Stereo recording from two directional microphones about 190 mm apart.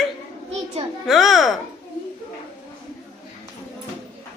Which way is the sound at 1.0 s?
Centre (ahead or behind).